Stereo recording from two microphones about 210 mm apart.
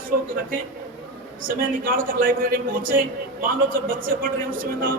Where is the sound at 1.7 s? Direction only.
40° right (ahead or behind).